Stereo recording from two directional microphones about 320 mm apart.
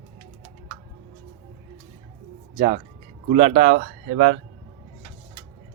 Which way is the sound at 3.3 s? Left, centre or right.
Right.